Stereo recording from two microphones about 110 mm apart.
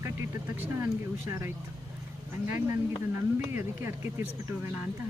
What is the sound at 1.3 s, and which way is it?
Speech, 25° right (ahead or behind).